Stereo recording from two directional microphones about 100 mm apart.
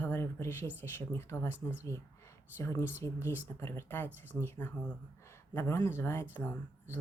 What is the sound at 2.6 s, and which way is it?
Speech, 25° left (ahead or behind).